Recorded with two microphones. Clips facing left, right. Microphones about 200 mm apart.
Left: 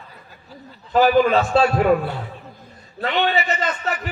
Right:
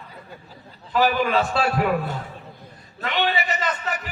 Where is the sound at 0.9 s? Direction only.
45° left (ahead or behind).